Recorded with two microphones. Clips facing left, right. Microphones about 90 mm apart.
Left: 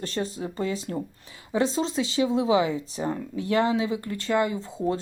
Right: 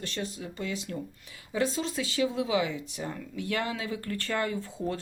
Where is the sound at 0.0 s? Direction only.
35° left (ahead or behind).